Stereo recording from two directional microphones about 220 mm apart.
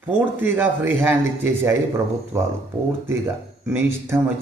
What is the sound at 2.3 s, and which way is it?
Speech, 10° right (ahead or behind).